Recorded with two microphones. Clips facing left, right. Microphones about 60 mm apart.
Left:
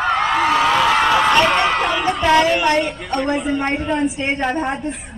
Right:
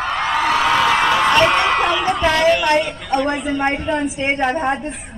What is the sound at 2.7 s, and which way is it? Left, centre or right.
A woman's voice, centre.